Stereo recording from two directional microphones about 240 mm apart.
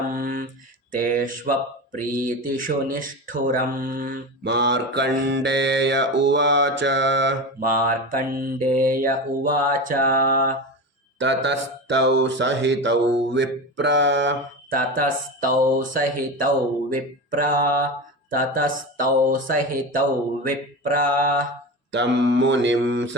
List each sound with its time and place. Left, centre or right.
0.1 s mantra: right
0.9 s speech: right
2.9 s mantra: right
11.2 s mantra: right
14.9 s speech: right
21.9 s mantra: right